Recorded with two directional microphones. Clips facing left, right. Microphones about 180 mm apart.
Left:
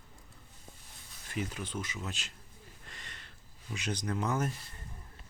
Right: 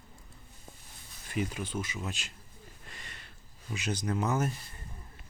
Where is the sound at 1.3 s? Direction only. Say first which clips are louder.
Right 4 dB; 15° right (ahead or behind).